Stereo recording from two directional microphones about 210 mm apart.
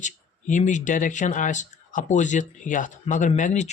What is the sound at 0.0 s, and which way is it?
Speech, 35° left (ahead or behind).